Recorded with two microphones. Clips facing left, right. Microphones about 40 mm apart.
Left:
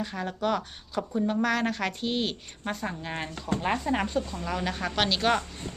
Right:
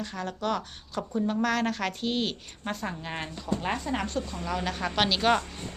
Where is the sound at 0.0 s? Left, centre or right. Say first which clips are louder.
Left 2 dB; centre.